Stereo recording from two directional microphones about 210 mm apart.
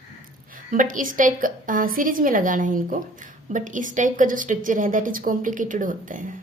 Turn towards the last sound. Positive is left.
turn(degrees=-40)  # may be behind; listen again after turning